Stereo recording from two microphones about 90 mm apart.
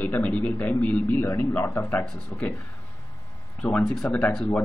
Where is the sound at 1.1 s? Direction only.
30° left (ahead or behind).